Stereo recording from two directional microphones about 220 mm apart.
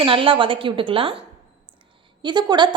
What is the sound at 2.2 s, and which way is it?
Speech, 20° right (ahead or behind).